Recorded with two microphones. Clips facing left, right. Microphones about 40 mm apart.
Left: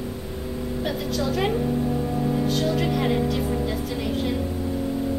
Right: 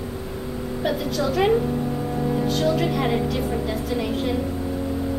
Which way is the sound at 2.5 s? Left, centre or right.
Centre.